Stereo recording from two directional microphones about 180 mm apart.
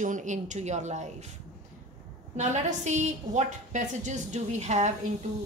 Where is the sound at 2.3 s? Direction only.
40° right (ahead or behind).